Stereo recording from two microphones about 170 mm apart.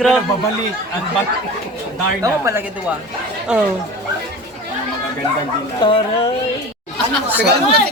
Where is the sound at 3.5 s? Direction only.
5° right (ahead or behind).